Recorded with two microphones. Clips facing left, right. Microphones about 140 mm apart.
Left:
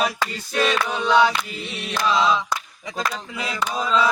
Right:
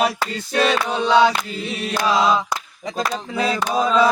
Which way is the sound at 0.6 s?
30° right (ahead or behind).